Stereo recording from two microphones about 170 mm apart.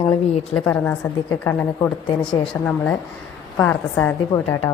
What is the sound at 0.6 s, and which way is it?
A woman's voice, 10° left (ahead or behind).